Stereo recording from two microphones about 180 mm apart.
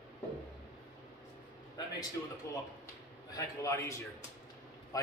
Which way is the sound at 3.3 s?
15° left (ahead or behind).